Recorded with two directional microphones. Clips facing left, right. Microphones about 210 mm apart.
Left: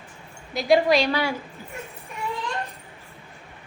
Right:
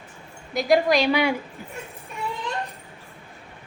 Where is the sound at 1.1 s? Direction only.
15° right (ahead or behind).